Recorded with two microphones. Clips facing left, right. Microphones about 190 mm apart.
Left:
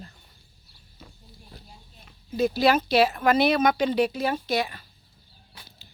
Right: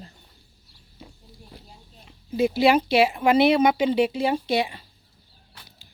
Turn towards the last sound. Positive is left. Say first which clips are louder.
# right 3 dB
turn(degrees=-25)  # may be behind; listen again after turning